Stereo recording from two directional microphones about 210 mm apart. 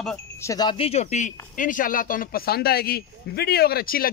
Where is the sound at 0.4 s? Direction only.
15° left (ahead or behind).